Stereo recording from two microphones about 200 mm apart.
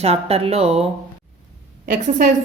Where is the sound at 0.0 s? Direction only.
30° right (ahead or behind).